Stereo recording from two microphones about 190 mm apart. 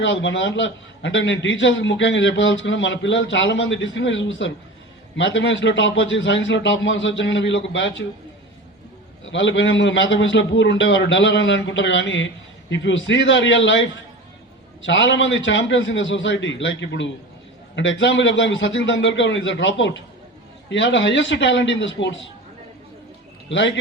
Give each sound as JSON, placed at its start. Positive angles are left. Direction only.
{"t": 0.0, "sound": "a man's voice", "side_deg": 75}
{"t": 9.3, "sound": "a man's voice", "side_deg": 75}
{"t": 14.8, "sound": "a man's voice", "side_deg": 70}
{"t": 23.5, "sound": "a man's voice", "side_deg": 75}